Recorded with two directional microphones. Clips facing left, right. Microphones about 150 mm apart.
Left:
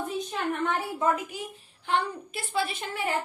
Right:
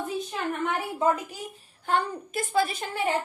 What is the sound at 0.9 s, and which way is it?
Speech, 30° right (ahead or behind).